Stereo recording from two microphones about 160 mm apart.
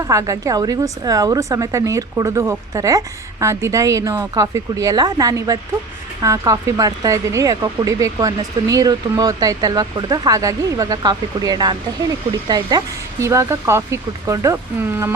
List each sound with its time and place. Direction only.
0.1 s speech: 20° right (ahead or behind)